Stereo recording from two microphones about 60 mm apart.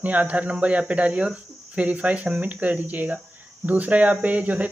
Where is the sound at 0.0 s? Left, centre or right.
Right.